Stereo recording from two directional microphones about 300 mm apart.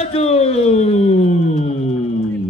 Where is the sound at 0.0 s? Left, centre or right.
Centre.